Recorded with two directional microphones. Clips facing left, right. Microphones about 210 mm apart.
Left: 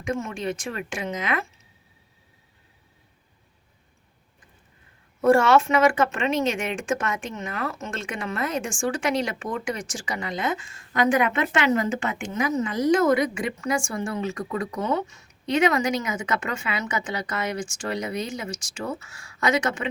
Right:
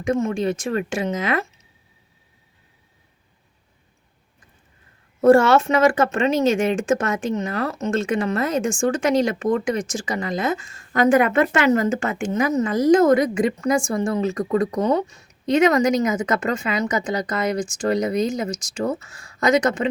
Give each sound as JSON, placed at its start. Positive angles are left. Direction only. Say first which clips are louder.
{"t": 0.0, "sound": "speech", "louder": "right 7 dB", "side_deg": -40}
{"t": 5.2, "sound": "speech", "louder": "right 4 dB", "side_deg": -40}